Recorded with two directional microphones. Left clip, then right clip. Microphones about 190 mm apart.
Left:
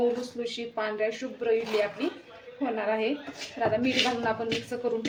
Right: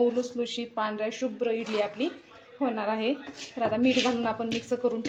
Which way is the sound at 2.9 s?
40° right (ahead or behind).